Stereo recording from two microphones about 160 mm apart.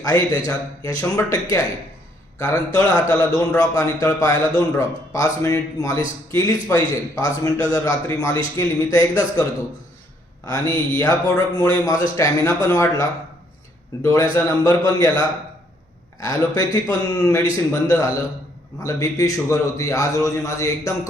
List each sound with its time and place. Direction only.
0.0 s a man's voice: 20° left (ahead or behind)
2.7 s a man's voice: 20° left (ahead or behind)
10.5 s a man's voice: 25° left (ahead or behind)
16.2 s a man's voice: 20° left (ahead or behind)